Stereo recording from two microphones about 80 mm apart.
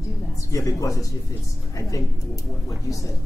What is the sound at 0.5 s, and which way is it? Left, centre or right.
Speech, left.